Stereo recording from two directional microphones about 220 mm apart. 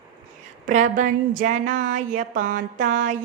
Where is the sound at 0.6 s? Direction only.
35° right (ahead or behind).